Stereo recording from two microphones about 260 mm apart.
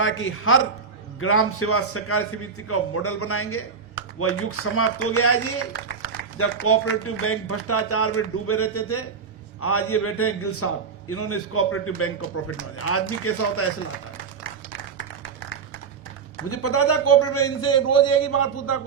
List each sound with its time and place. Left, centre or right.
0.0 s a man's voice: left
14.7 s a sound: left
16.5 s a man's voice: left